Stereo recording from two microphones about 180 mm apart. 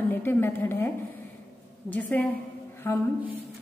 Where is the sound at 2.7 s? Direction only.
15° left (ahead or behind).